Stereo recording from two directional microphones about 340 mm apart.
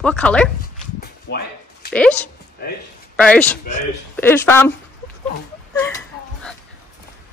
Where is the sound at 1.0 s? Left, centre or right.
Left.